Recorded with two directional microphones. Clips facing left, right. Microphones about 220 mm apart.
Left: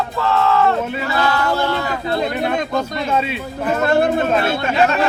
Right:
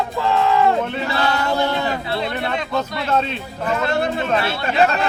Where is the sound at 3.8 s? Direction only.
50° left (ahead or behind).